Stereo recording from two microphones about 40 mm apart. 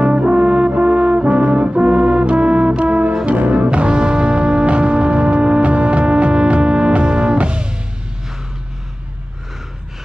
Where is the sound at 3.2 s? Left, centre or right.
Right.